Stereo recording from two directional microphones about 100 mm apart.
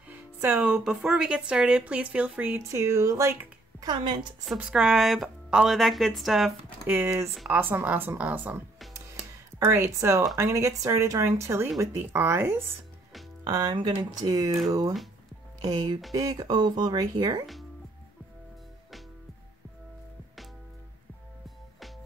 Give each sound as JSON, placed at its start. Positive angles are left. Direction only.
{"t": 0.1, "sound": "music", "side_deg": -20}
{"t": 0.7, "sound": "speech", "side_deg": -5}
{"t": 3.8, "sound": "speech", "side_deg": -50}
{"t": 4.6, "sound": "a woman's voice", "side_deg": -10}
{"t": 6.9, "sound": "speech", "side_deg": -25}
{"t": 9.6, "sound": "speech", "side_deg": -25}
{"t": 13.4, "sound": "speech", "side_deg": -45}